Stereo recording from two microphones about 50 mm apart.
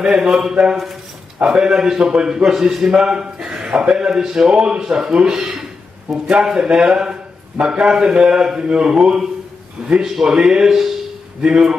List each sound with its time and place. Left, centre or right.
0.0 s a man's voice: centre
4.2 s speech: centre
4.5 s a man's voice: centre